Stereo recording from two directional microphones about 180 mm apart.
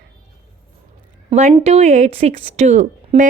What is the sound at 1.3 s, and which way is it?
A woman's voice, 35° right (ahead or behind).